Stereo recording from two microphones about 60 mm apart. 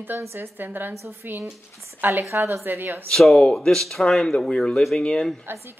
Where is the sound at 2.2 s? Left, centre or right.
Right.